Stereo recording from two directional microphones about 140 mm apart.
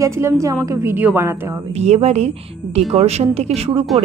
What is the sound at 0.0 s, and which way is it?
A woman's voice, 20° right (ahead or behind).